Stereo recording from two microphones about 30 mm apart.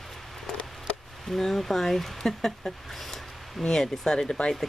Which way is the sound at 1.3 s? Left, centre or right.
Centre.